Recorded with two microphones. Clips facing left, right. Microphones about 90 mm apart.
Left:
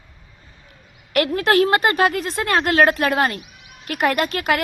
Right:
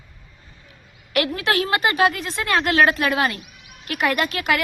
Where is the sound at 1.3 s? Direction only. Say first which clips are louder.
Left 5 dB; 45° left (ahead or behind).